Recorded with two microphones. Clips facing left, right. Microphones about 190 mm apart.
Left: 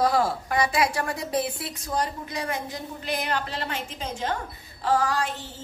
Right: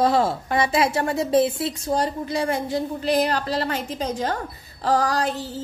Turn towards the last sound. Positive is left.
turn(degrees=-35)  # may be behind; listen again after turning